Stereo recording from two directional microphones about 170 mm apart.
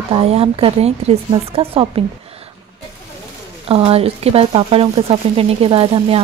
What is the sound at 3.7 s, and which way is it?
A woman's voice, 35° right (ahead or behind).